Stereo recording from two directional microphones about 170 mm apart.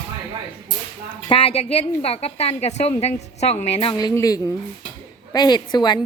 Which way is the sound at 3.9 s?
20° left (ahead or behind).